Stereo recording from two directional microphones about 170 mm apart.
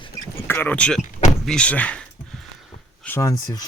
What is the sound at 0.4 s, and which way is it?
Speech, 10° left (ahead or behind).